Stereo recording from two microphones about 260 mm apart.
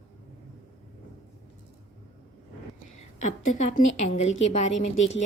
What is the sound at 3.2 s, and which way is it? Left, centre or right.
A woman's voice, left.